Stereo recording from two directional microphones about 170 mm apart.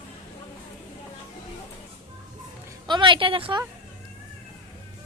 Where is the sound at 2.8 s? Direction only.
30° right (ahead or behind).